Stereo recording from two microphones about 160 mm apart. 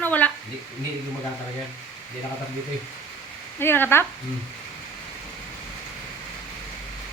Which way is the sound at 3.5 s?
15° left (ahead or behind).